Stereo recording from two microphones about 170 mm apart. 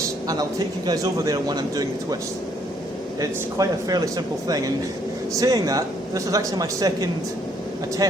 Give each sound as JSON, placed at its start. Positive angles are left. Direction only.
{"t": 0.9, "sound": "speech", "side_deg": -20}
{"t": 3.2, "sound": "speech", "side_deg": -20}